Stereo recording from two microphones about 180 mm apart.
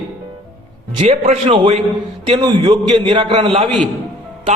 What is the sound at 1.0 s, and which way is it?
A man's voice, 40° right (ahead or behind).